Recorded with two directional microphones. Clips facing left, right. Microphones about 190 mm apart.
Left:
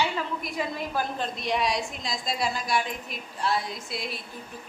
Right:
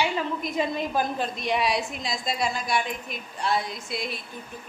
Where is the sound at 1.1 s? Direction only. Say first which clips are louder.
Right 2 dB; 5° right (ahead or behind).